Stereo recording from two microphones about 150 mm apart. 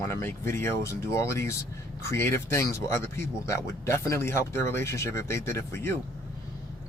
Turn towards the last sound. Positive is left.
turn(degrees=20)  # may be behind; listen again after turning